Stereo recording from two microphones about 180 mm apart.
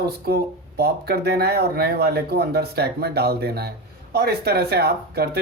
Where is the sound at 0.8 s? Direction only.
60° right (ahead or behind).